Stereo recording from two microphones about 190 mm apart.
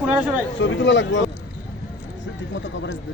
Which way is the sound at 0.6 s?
75° left (ahead or behind).